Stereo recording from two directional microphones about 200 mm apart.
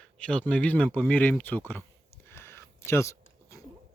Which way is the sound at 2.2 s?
10° left (ahead or behind).